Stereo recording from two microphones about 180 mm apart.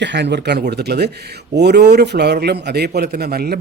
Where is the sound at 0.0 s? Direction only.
75° right (ahead or behind).